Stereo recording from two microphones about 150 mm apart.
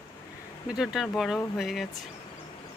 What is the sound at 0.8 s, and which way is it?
Speech, centre (ahead or behind).